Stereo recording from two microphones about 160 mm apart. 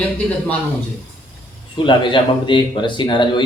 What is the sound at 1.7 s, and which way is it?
Speech, 30° left (ahead or behind).